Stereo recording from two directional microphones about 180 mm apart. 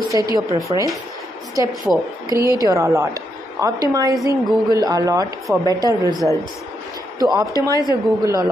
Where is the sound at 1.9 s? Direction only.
5° right (ahead or behind).